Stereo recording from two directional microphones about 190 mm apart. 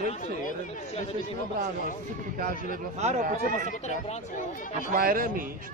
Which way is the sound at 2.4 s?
45° right (ahead or behind).